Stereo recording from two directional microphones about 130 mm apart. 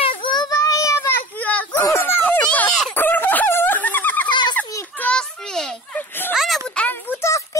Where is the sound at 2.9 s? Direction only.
15° left (ahead or behind).